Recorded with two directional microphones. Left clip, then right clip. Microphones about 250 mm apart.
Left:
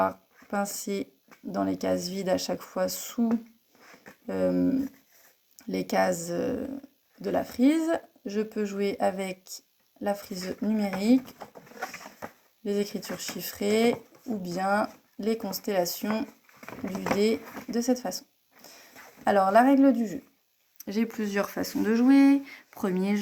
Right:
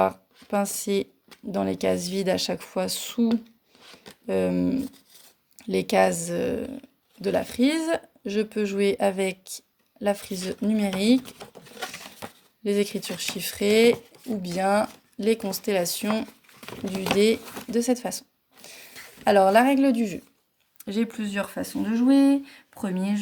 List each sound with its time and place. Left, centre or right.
0.5 s speech: right
4.5 s speech: right
5.6 s speech: right
16.1 s speech: right
17.2 s speech: right
17.4 s speech: centre
17.7 s speech: right
18.6 s a sound: right
20.8 s speech: right